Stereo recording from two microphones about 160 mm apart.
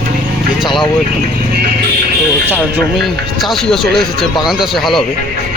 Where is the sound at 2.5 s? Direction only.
5° right (ahead or behind).